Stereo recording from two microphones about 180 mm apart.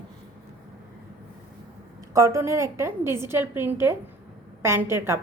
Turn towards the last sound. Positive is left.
turn(degrees=-15)  # may be behind; listen again after turning